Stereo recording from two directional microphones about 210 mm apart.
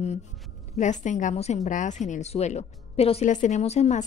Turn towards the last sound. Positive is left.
turn(degrees=35)  # may be behind; listen again after turning